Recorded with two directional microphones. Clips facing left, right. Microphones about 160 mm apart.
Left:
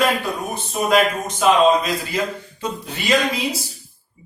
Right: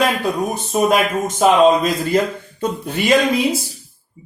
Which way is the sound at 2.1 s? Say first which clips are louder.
Right 7 dB; 50° right (ahead or behind).